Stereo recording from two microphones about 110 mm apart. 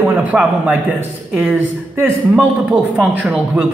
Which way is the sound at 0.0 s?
20° right (ahead or behind).